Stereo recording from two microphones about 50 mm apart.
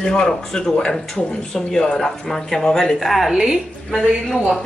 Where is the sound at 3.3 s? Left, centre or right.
Centre.